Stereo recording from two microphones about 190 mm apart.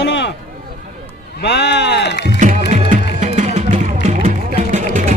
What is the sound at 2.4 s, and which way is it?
Music, 40° right (ahead or behind).